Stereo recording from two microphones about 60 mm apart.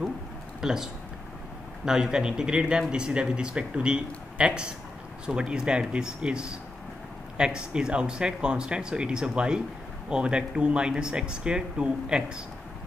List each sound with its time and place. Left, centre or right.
0.6 s speech: centre
1.9 s speech: centre